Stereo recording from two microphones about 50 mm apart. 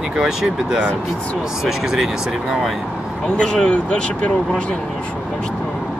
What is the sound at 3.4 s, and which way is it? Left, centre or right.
Speech, centre.